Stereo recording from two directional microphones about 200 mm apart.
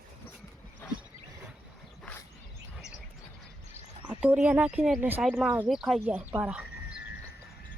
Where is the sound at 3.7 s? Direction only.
5° right (ahead or behind).